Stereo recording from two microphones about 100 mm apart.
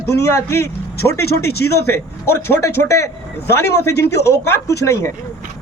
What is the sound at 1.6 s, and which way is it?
Speech, 25° left (ahead or behind).